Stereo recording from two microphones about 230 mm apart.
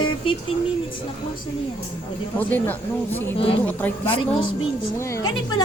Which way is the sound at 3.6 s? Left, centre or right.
Centre.